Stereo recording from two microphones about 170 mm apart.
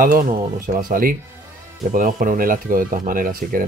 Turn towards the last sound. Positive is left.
turn(degrees=-55)  # may be behind; listen again after turning